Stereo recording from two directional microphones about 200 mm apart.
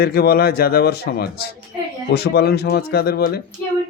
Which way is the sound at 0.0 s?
50° left (ahead or behind).